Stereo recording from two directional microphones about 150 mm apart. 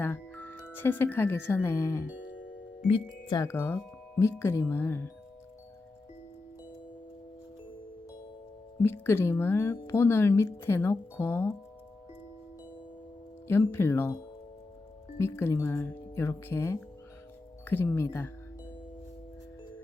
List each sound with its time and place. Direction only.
0.0 s speech: 10° left (ahead or behind)
2.8 s speech: 35° left (ahead or behind)
3.4 s speech: 15° left (ahead or behind)
8.8 s speech: 15° left (ahead or behind)
13.5 s speech: 15° left (ahead or behind)
15.2 s speech: 15° left (ahead or behind)